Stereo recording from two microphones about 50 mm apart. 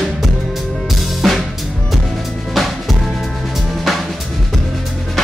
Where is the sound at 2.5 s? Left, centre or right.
Centre.